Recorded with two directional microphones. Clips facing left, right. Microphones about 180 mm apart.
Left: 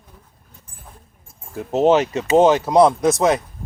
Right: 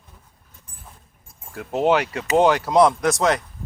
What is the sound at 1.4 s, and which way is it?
Speech, 20° left (ahead or behind).